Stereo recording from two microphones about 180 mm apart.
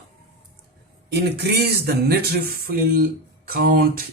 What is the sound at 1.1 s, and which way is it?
Speech, 65° right (ahead or behind).